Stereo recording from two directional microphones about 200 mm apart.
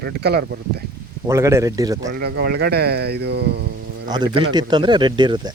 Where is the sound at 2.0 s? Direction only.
50° right (ahead or behind).